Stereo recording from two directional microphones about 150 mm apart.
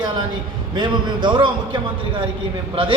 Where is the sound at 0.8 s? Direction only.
30° right (ahead or behind).